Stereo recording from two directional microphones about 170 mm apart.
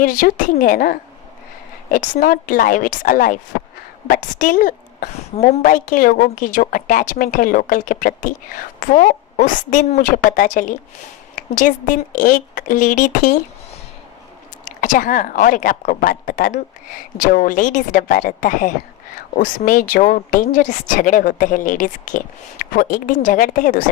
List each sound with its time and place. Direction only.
0.0 s a woman's voice: 55° left (ahead or behind)
14.6 s a woman's voice: 50° left (ahead or behind)